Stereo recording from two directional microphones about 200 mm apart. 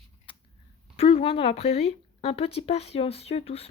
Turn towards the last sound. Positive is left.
turn(degrees=30)  # may be behind; listen again after turning